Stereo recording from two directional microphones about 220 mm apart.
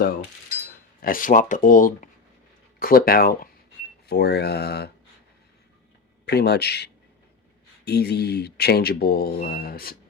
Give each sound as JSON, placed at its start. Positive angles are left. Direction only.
{"t": 1.0, "sound": "speech", "side_deg": 40}
{"t": 6.2, "sound": "speech", "side_deg": 50}